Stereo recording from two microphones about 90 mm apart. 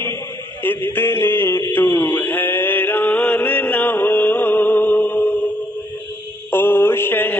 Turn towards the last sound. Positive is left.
turn(degrees=25)  # may be behind; listen again after turning